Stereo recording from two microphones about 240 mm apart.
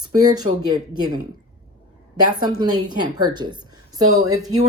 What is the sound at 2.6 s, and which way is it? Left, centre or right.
A woman's voice, centre.